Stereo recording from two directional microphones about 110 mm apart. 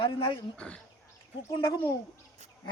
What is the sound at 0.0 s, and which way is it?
Speech, 50° left (ahead or behind).